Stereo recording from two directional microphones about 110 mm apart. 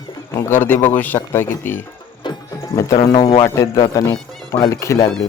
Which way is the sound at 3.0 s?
40° left (ahead or behind).